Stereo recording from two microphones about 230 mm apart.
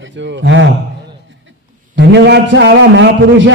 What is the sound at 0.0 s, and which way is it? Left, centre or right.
Speech, right.